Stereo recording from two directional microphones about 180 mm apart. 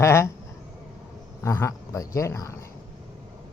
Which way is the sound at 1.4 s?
15° left (ahead or behind).